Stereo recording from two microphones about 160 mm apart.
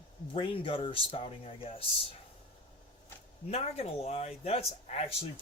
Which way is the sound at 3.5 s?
40° left (ahead or behind).